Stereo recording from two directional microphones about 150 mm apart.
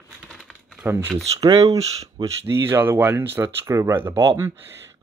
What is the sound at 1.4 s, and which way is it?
Speech, 25° right (ahead or behind).